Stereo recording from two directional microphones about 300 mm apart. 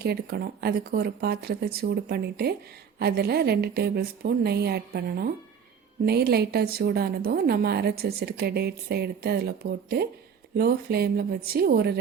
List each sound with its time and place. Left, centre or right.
0.0 s a woman's voice: right